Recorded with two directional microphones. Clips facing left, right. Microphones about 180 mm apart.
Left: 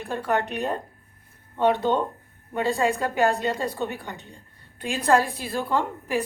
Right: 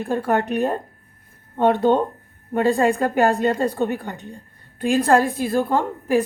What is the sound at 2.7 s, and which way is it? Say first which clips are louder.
A woman's voice: right 5 dB; 55° right (ahead or behind).